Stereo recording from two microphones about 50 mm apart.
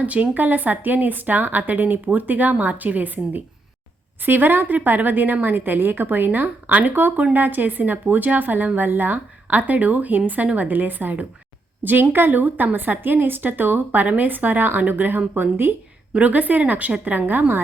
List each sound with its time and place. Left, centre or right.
0.0 s speech: right
16.1 s speech: right